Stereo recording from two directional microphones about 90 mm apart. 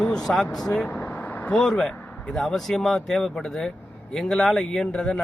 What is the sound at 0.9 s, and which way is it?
Vehicle, 15° left (ahead or behind).